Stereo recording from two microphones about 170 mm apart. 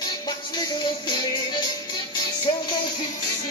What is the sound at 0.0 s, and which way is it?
Music, 25° left (ahead or behind).